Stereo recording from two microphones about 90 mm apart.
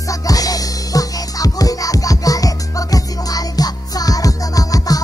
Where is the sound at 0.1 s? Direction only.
40° left (ahead or behind).